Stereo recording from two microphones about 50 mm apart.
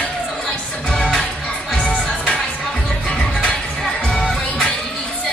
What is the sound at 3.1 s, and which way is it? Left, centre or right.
Music, left.